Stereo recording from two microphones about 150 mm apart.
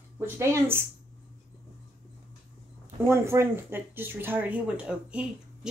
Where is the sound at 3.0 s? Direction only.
15° right (ahead or behind).